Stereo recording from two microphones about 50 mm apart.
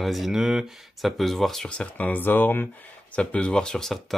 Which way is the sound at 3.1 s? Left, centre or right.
Left.